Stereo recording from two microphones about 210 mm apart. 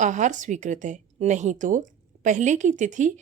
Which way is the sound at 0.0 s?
35° right (ahead or behind).